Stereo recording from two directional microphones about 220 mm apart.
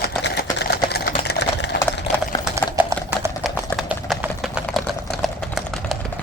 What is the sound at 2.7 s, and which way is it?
Typing, 10° right (ahead or behind).